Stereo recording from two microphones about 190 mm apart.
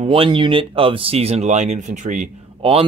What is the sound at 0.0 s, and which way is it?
Speech, 30° right (ahead or behind).